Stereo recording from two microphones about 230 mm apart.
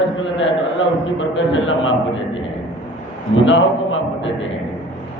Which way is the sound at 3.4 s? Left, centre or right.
Left.